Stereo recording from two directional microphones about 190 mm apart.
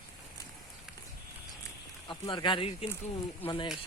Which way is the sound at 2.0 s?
25° left (ahead or behind).